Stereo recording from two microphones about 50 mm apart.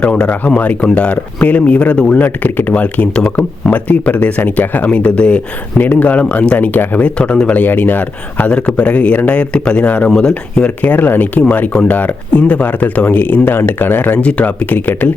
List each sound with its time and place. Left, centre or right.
0.0 s speech: centre
0.3 s speech: left
3.2 s speech: centre
3.7 s speech: left
7.6 s speech: left
10.2 s speech: centre
10.8 s speech: left
13.1 s speech: left
14.2 s speech: left